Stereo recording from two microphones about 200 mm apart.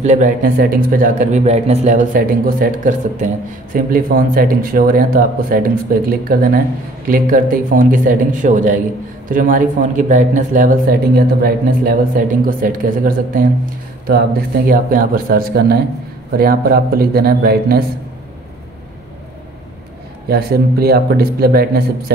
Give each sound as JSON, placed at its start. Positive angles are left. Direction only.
{"t": 0.0, "sound": "a man's voice", "side_deg": -35}
{"t": 20.2, "sound": "speech", "side_deg": -50}